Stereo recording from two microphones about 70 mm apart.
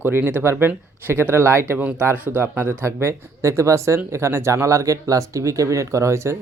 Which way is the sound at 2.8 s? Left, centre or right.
Right.